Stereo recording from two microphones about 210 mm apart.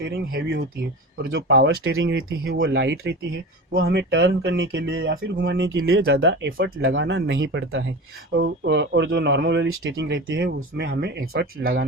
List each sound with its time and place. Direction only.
0.0 s speech: 50° right (ahead or behind)
5.6 s speech: 70° right (ahead or behind); by 11.9 s 45° right (ahead or behind)